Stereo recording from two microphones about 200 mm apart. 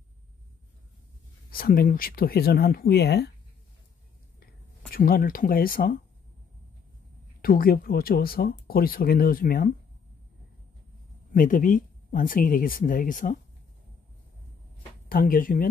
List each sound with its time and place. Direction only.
1.5 s speech: 45° left (ahead or behind)
4.9 s speech: 45° left (ahead or behind)
7.4 s speech: 45° left (ahead or behind)
11.3 s speech: 40° left (ahead or behind)
15.0 s speech: 45° left (ahead or behind)